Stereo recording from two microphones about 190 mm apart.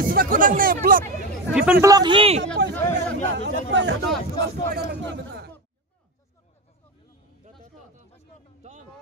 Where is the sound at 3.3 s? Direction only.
70° right (ahead or behind).